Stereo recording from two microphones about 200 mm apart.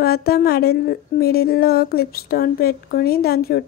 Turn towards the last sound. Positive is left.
turn(degrees=50)  # may be behind; listen again after turning